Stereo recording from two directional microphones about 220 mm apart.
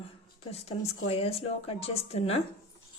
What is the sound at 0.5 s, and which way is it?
A woman's voice, 30° left (ahead or behind).